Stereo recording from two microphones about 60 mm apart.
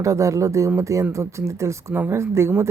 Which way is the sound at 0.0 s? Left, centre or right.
Right.